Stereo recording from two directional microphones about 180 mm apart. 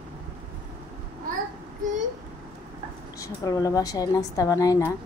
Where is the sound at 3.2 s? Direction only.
20° left (ahead or behind).